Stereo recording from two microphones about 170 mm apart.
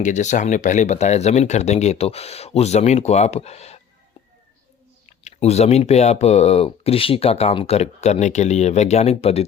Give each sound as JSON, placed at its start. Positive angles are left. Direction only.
{"t": 0.0, "sound": "speech", "side_deg": 45}
{"t": 5.0, "sound": "speech", "side_deg": 40}